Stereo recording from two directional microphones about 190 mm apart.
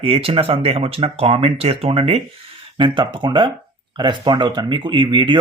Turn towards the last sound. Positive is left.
turn(degrees=-25)  # may be behind; listen again after turning